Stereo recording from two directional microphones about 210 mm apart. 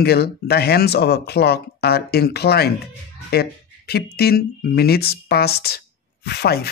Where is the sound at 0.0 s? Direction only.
50° left (ahead or behind).